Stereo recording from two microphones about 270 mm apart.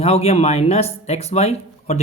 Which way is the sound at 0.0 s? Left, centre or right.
Left.